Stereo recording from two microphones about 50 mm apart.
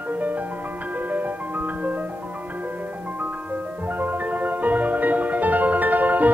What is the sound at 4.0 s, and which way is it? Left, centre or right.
Music, right.